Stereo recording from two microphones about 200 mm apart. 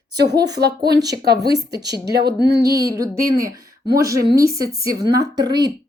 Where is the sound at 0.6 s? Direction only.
55° right (ahead or behind).